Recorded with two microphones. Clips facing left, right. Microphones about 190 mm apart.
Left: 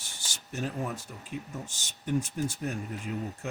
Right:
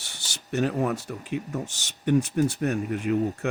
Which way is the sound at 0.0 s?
70° right (ahead or behind).